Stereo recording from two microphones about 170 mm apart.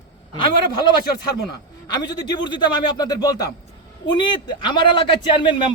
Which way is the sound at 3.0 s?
25° left (ahead or behind).